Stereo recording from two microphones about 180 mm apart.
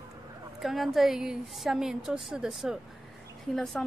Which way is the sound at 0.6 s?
Centre (ahead or behind).